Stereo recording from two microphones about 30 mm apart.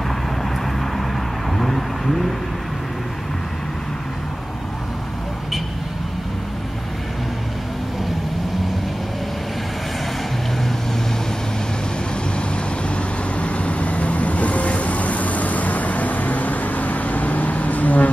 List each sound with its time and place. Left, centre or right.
1.6 s vehicle: centre
12.9 s vehicle: left